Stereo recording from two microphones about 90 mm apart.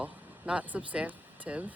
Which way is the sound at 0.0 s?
15° right (ahead or behind).